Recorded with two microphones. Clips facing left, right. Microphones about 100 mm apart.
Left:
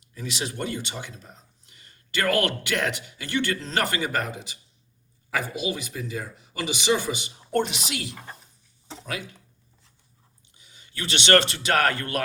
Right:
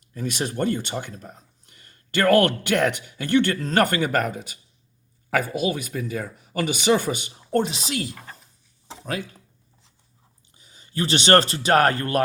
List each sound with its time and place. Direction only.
0.1 s speech: 50° right (ahead or behind)
7.7 s a woman's voice: 35° right (ahead or behind)
8.1 s speech: centre (ahead or behind)
9.0 s a woman's voice: 35° right (ahead or behind)
10.6 s speech: 40° right (ahead or behind)